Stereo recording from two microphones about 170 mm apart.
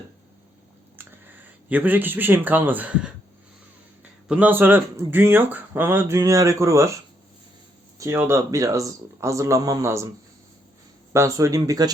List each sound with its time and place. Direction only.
0.9 s speech: 10° right (ahead or behind)
4.3 s speech: 10° right (ahead or behind)
11.1 s speech: 15° right (ahead or behind)